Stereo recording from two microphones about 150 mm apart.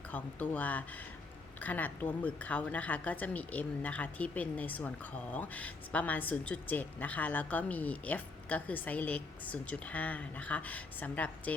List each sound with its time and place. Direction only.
0.1 s a woman's voice: 10° left (ahead or behind)